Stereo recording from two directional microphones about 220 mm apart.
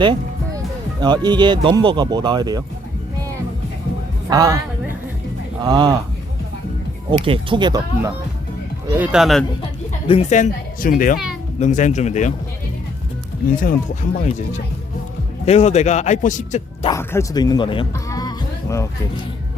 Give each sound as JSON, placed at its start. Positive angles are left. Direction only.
{"t": 0.0, "sound": "speech", "side_deg": -20}
{"t": 4.3, "sound": "a sound", "side_deg": -15}
{"t": 5.6, "sound": "speech", "side_deg": -20}
{"t": 7.1, "sound": "speech", "side_deg": -25}
{"t": 8.9, "sound": "speech", "side_deg": -5}
{"t": 10.1, "sound": "a man's voice", "side_deg": 30}
{"t": 13.6, "sound": "a man's voice", "side_deg": 40}
{"t": 15.4, "sound": "a man's voice", "side_deg": 30}
{"t": 16.9, "sound": "music", "side_deg": 10}